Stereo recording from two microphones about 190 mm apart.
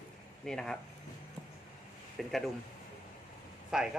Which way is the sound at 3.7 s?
5° right (ahead or behind).